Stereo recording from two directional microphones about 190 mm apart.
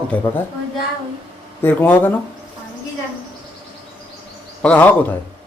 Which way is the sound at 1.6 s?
10° left (ahead or behind).